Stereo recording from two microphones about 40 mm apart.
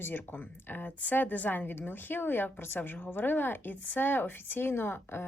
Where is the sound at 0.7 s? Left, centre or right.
Left.